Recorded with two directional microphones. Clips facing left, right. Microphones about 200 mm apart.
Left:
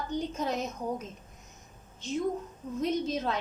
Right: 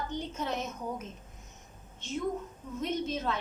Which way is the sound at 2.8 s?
35° left (ahead or behind).